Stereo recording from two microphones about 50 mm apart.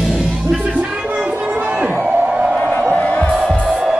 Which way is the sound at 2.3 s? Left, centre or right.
Centre.